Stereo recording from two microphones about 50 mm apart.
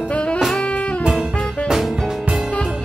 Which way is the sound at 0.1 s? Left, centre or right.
Left.